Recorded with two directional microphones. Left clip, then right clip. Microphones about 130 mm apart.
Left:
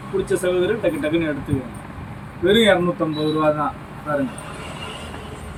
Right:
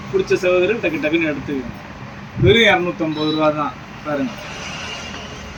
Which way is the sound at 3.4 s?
15° left (ahead or behind).